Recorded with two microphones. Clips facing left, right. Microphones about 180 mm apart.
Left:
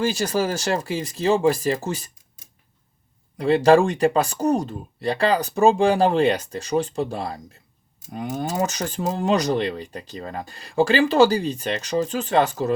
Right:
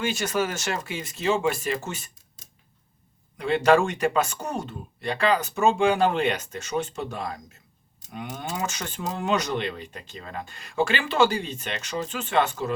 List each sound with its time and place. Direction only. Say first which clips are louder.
0.0 s speech: left 4 dB; 35° left (ahead or behind)
3.3 s speech: left 5 dB; 35° left (ahead or behind)